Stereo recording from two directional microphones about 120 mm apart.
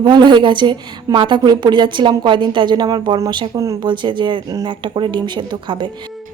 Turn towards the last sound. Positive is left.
turn(degrees=-40)  # may be behind; listen again after turning